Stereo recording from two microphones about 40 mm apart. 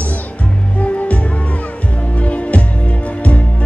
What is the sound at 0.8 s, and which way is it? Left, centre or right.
Music, left.